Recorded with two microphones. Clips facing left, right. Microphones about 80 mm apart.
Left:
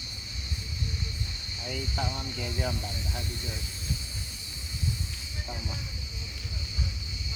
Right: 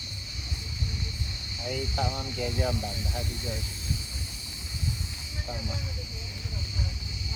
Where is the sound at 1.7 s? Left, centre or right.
Centre.